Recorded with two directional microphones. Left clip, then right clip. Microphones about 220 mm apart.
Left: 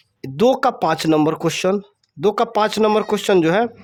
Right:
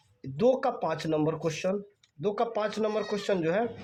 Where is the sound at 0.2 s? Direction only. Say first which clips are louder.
Left 9 dB; 50° left (ahead or behind).